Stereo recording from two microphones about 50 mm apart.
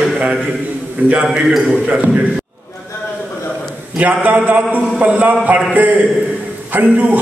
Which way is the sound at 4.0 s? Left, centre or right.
Right.